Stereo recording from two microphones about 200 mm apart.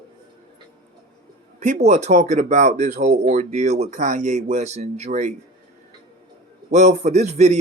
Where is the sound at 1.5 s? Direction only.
35° right (ahead or behind).